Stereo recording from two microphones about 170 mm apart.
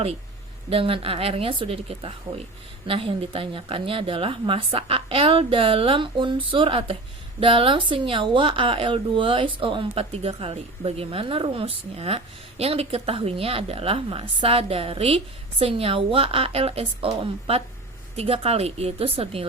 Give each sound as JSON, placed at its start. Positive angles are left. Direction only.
{"t": 0.7, "sound": "speech", "side_deg": -30}